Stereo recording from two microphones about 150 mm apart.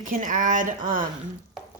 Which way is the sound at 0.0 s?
60° right (ahead or behind).